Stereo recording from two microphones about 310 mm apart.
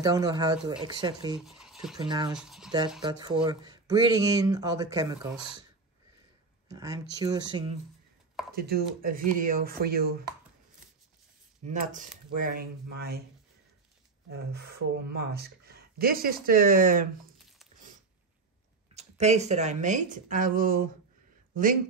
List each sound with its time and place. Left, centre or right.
0.0 s speech: centre
1.4 s speech: centre
2.0 s speech: centre
2.3 s speech: centre
3.0 s speech: centre
6.7 s speech: centre
8.5 s a woman's voice: right
11.6 s a woman's voice: right
14.3 s a woman's voice: right
18.9 s a woman's voice: right